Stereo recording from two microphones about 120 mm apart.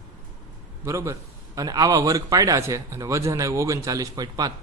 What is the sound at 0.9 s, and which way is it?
Speech, 25° right (ahead or behind).